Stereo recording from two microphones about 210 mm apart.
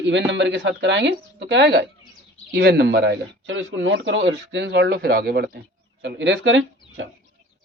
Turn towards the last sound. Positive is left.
turn(degrees=-60)  # may be behind; listen again after turning